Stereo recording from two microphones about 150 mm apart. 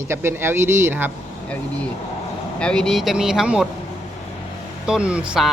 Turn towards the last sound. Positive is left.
turn(degrees=-5)  # may be behind; listen again after turning